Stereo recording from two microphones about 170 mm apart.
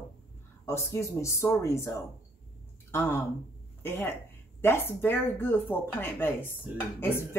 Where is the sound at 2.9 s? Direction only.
15° left (ahead or behind).